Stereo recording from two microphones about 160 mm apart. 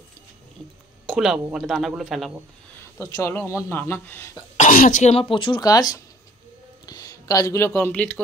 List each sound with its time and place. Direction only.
1.0 s speech: centre (ahead or behind)
3.0 s speech: 15° left (ahead or behind)
4.6 s speech: 55° left (ahead or behind); by 8.2 s 10° left (ahead or behind)